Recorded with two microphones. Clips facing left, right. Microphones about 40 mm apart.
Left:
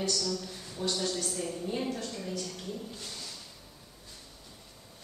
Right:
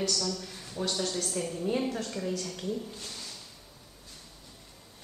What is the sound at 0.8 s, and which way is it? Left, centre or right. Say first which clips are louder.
Speech: right 1 dB; right.